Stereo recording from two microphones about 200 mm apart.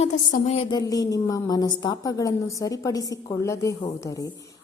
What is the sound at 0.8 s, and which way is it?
A woman's voice, 15° left (ahead or behind).